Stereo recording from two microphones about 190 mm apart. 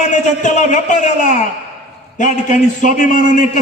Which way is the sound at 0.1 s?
40° left (ahead or behind).